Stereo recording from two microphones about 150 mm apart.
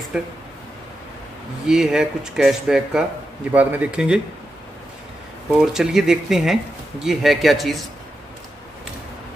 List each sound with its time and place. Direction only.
0.1 s speech: 5° right (ahead or behind)
1.7 s speech: 5° right (ahead or behind)
5.7 s speech: 5° right (ahead or behind)